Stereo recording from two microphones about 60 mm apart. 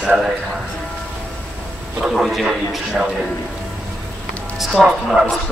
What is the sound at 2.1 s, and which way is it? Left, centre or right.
Speech, centre.